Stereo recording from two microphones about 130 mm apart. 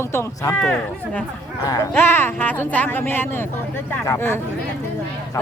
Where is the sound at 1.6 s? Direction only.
30° left (ahead or behind).